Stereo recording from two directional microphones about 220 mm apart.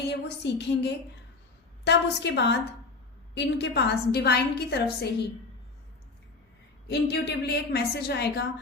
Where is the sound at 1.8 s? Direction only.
50° left (ahead or behind).